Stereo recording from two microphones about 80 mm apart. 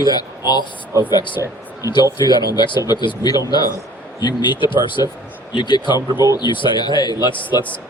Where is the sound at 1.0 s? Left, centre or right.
Left.